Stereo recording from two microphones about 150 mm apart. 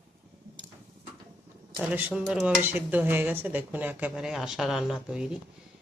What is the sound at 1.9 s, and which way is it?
Dishes, 10° right (ahead or behind).